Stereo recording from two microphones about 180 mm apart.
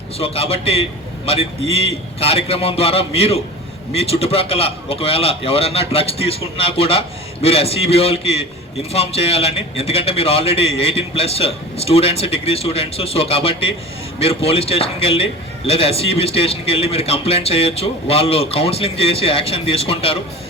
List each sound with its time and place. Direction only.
0.2 s a man's voice: 35° left (ahead or behind)